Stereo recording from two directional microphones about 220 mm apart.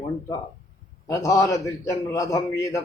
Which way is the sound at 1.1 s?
15° left (ahead or behind).